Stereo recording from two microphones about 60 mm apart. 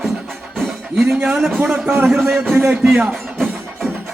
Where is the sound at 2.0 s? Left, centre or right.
Centre.